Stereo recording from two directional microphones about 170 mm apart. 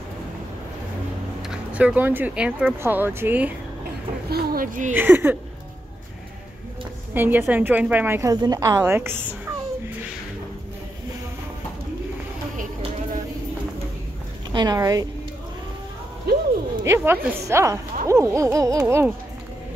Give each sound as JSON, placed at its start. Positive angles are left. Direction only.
{"t": 1.5, "sound": "speech", "side_deg": -5}
{"t": 4.3, "sound": "speech", "side_deg": -65}
{"t": 4.9, "sound": "speech", "side_deg": -10}
{"t": 7.2, "sound": "speech", "side_deg": -10}
{"t": 14.5, "sound": "a woman's voice", "side_deg": -25}
{"t": 16.3, "sound": "a sound", "side_deg": -70}
{"t": 16.8, "sound": "speech", "side_deg": -15}